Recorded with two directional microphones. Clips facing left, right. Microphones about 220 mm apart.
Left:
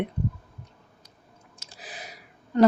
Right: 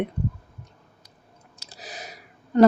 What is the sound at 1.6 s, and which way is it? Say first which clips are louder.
Chewing: right 3 dB; 35° right (ahead or behind).